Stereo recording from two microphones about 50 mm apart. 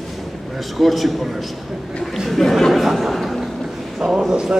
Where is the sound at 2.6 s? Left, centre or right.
Centre.